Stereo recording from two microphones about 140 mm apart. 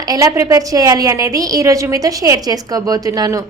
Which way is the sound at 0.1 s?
25° right (ahead or behind).